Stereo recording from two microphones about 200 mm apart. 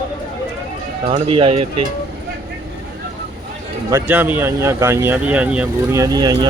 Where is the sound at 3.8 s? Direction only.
10° right (ahead or behind).